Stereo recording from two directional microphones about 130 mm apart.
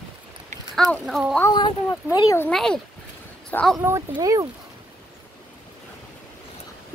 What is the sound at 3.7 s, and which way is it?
Speech, 25° right (ahead or behind).